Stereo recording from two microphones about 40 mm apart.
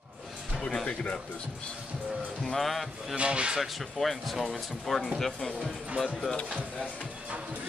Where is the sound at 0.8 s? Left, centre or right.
Left.